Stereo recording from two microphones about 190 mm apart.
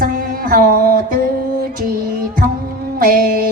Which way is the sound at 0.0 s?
50° right (ahead or behind).